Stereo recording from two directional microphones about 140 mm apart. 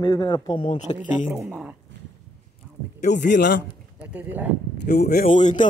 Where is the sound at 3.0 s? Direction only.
65° left (ahead or behind).